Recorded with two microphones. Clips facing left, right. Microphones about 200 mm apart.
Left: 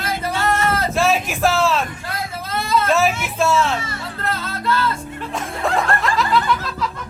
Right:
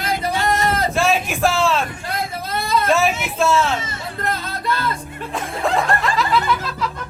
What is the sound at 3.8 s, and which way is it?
Music, 20° right (ahead or behind).